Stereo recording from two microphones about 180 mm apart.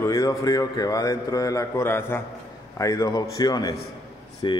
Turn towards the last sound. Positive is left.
turn(degrees=25)  # may be behind; listen again after turning